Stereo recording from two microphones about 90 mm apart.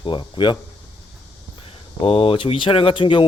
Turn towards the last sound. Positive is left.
turn(degrees=70)  # may be behind; listen again after turning